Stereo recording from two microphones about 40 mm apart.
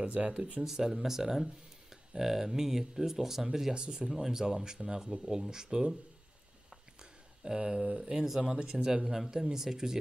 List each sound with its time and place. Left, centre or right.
0.0 s speech: right
0.7 s speech: centre
3.7 s speech: centre
7.0 s speech: right